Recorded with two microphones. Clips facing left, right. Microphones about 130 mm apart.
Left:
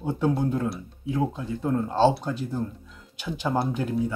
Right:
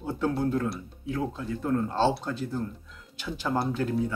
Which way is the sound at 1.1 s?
20° left (ahead or behind).